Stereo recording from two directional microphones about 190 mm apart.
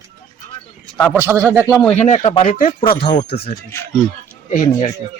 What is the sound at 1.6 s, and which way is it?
Speech, 5° left (ahead or behind).